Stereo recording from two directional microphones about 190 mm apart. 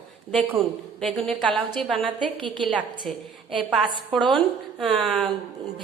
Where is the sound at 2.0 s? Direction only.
25° right (ahead or behind).